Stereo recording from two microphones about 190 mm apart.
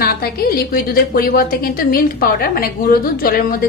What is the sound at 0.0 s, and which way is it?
A woman's voice, 55° left (ahead or behind).